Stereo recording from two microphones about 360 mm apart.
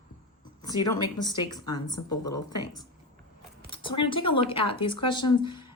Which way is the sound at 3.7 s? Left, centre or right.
Centre.